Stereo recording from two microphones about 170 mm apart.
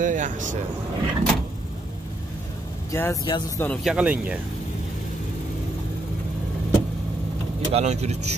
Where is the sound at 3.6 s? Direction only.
5° left (ahead or behind).